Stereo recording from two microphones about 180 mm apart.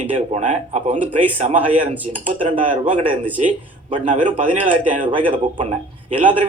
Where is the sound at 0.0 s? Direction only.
40° right (ahead or behind).